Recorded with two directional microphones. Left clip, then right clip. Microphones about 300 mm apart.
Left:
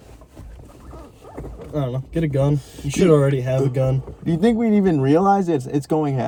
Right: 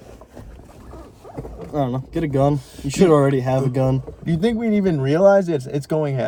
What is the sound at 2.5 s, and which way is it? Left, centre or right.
Speech, centre.